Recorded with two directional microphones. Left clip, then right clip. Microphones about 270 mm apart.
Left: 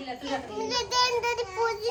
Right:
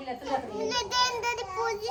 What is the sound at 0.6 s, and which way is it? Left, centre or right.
Child singing, centre.